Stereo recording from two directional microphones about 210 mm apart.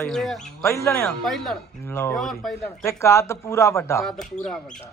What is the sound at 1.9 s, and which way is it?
Speech, 10° left (ahead or behind).